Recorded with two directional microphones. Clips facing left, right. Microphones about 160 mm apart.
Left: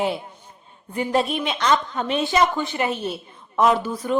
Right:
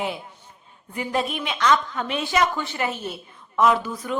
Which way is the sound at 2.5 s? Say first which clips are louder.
Left 3 dB; 20° left (ahead or behind).